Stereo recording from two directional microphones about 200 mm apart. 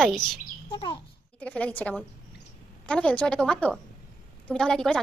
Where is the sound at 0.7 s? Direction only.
25° left (ahead or behind).